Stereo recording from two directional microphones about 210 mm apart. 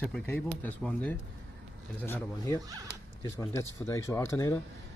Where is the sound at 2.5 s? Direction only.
15° right (ahead or behind).